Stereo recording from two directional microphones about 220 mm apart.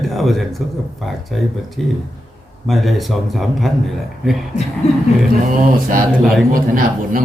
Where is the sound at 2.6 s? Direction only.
Centre (ahead or behind).